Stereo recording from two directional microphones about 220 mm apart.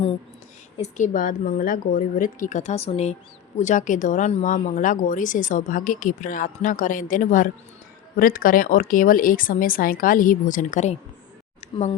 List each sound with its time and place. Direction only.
0.8 s speech: 35° left (ahead or behind)